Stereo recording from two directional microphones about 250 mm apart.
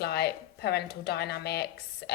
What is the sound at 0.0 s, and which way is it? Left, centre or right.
A woman's voice, left.